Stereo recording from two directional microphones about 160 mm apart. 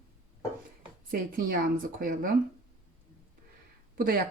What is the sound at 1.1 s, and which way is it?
A woman's voice, 65° right (ahead or behind).